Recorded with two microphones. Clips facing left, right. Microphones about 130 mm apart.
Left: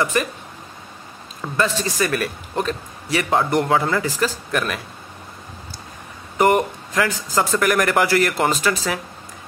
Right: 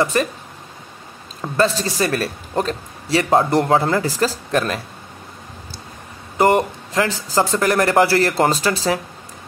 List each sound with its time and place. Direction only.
0.0 s speech: 35° right (ahead or behind)
1.4 s speech: 35° right (ahead or behind)
6.3 s speech: 30° right (ahead or behind)